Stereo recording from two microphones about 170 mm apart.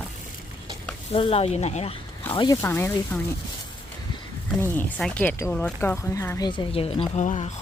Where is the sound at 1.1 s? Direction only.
35° left (ahead or behind).